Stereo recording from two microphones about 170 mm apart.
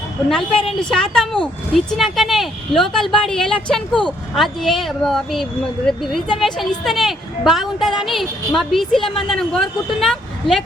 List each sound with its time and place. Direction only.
0.8 s speech: 5° left (ahead or behind)
9.0 s a woman's voice: 30° left (ahead or behind)
9.2 s speech: centre (ahead or behind)